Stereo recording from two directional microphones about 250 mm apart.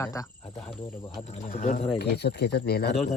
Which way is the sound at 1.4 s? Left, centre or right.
Left.